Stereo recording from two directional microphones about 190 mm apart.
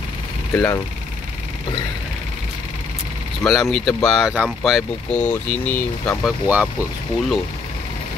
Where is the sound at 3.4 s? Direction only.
5° left (ahead or behind).